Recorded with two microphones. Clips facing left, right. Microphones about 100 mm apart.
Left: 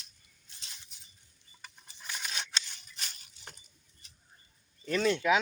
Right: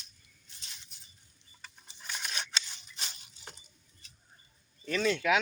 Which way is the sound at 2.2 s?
5° right (ahead or behind).